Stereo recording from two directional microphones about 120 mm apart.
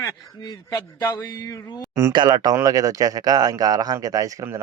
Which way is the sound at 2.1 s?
35° right (ahead or behind).